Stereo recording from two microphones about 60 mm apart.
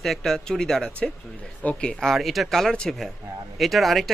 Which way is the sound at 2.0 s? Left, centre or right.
Centre.